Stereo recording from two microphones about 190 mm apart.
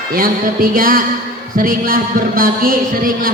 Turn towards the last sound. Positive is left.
turn(degrees=-50)  # may be behind; listen again after turning